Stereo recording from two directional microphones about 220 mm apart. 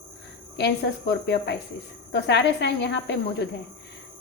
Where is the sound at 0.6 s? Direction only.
50° left (ahead or behind).